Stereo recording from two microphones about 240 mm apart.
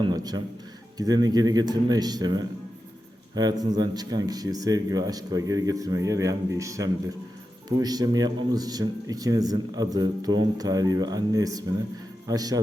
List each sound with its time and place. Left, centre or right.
0.0 s a man's voice: centre